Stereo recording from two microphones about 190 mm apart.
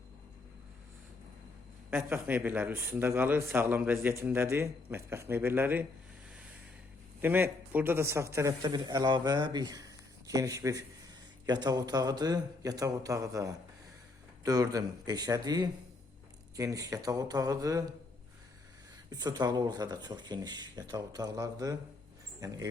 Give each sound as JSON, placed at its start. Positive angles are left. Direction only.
{"t": 1.9, "sound": "a man's voice", "side_deg": -10}
{"t": 7.2, "sound": "a man's voice", "side_deg": -10}
{"t": 19.1, "sound": "speech", "side_deg": -20}